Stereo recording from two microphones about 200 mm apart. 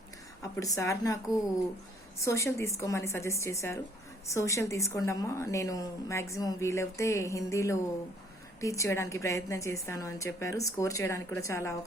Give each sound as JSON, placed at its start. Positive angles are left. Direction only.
{"t": 0.5, "sound": "a woman's voice", "side_deg": 15}